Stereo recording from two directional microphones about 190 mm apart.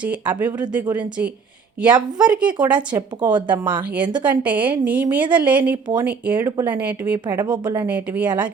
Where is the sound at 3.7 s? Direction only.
10° right (ahead or behind).